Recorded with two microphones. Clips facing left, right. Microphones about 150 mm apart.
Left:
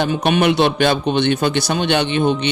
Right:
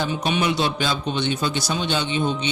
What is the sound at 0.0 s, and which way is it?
Speech, 60° left (ahead or behind).